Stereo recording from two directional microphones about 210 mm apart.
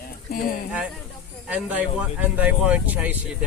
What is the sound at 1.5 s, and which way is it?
Speech, 10° right (ahead or behind).